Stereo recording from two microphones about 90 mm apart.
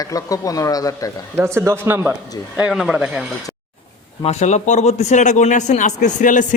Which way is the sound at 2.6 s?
5° right (ahead or behind).